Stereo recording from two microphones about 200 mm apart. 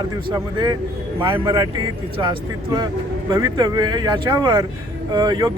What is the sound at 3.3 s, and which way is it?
Speech, 20° right (ahead or behind).